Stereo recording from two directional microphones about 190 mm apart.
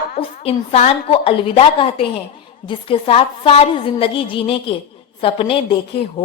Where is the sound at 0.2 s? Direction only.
30° left (ahead or behind).